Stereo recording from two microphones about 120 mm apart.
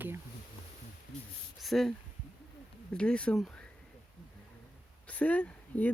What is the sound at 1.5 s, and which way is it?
Speech, centre (ahead or behind).